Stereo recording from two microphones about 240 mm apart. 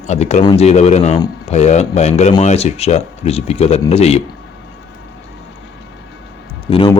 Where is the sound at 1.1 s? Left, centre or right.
Centre.